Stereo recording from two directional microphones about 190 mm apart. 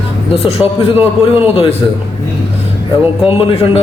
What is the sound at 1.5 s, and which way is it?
Speech, 30° left (ahead or behind).